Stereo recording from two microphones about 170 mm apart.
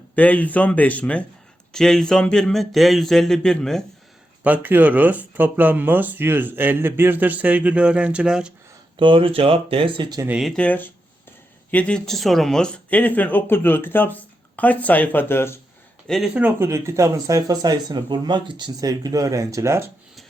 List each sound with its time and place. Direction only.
0.2 s speech: 10° left (ahead or behind)
4.4 s speech: 10° right (ahead or behind)
9.0 s speech: 30° right (ahead or behind)
10.2 s speech: 5° right (ahead or behind); by 15.5 s 15° left (ahead or behind)
16.0 s speech: centre (ahead or behind)
16.3 s speech: 10° right (ahead or behind)